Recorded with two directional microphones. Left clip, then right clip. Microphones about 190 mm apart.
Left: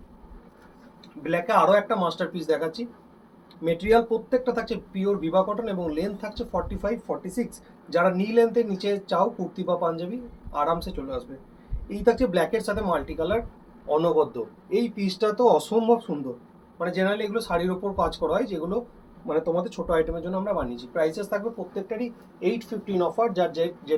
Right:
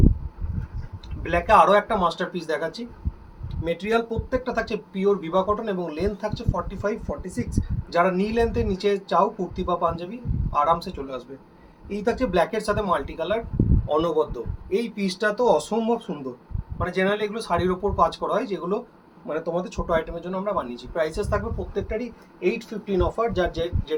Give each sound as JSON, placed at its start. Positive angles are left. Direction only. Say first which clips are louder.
{"t": 1.2, "sound": "speech", "louder": "right 4 dB", "side_deg": -20}
{"t": 14.7, "sound": "speech", "louder": "right 1 dB", "side_deg": -25}